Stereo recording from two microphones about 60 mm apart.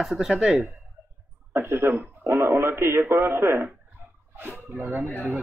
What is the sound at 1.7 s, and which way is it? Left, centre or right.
Speech, right.